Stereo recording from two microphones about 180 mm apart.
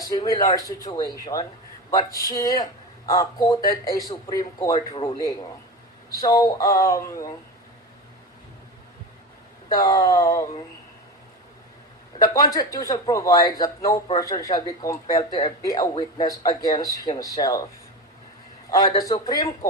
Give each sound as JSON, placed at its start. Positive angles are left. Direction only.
{"t": 0.3, "sound": "speech", "side_deg": 20}
{"t": 9.8, "sound": "speech", "side_deg": 20}
{"t": 12.2, "sound": "speech", "side_deg": 20}
{"t": 18.7, "sound": "speech", "side_deg": 20}